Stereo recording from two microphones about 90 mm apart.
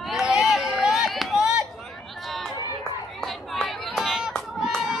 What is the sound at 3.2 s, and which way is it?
Chatter, 5° left (ahead or behind).